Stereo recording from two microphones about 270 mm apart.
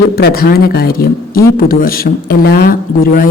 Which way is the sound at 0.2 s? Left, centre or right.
Left.